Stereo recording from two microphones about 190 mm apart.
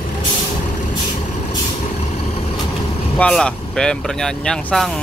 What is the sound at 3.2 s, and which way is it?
Speech, 5° left (ahead or behind).